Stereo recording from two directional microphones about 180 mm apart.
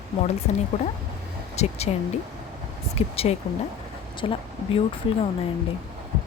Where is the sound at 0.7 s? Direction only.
35° left (ahead or behind).